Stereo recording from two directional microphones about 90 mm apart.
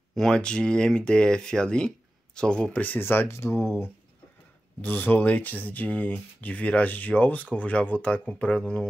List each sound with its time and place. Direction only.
0.1 s speech: 5° left (ahead or behind); by 3.7 s 30° left (ahead or behind)
4.8 s speech: 20° left (ahead or behind)